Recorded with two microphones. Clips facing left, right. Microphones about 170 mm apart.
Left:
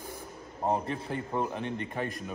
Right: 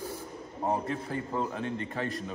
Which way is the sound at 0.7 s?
20° left (ahead or behind).